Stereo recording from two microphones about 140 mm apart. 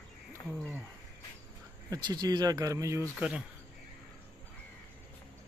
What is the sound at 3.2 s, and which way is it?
Speech, 10° right (ahead or behind).